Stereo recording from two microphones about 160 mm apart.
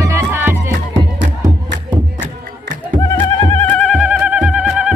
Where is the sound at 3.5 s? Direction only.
5° left (ahead or behind).